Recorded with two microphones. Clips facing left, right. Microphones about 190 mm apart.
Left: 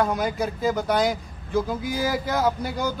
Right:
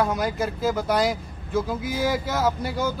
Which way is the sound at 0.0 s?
Centre (ahead or behind).